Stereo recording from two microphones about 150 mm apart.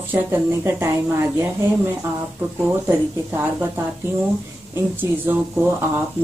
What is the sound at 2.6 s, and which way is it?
Speech, 10° right (ahead or behind).